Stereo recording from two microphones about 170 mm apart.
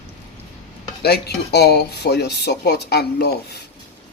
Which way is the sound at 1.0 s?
70° left (ahead or behind).